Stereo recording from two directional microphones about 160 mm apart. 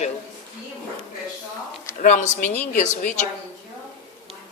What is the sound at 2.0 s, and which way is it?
Speech, 50° left (ahead or behind).